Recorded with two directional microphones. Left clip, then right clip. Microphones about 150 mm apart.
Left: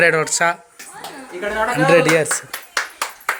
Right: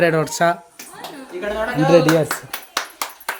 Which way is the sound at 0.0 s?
30° right (ahead or behind).